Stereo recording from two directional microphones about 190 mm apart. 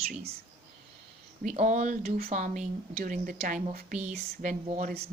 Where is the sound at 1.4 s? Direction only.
40° right (ahead or behind).